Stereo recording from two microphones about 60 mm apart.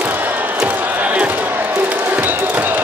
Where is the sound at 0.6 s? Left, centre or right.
Right.